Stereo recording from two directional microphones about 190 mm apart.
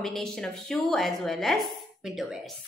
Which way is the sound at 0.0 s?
Centre (ahead or behind).